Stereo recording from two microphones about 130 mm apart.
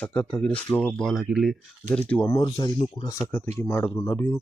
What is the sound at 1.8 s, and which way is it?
Speech, 10° left (ahead or behind).